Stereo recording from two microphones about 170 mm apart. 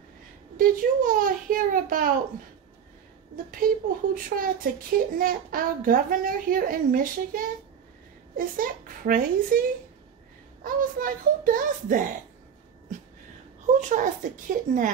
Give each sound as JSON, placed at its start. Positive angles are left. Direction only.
{"t": 0.6, "sound": "a child's voice", "side_deg": -55}
{"t": 3.5, "sound": "a child's voice", "side_deg": -55}
{"t": 13.7, "sound": "a child's voice", "side_deg": -45}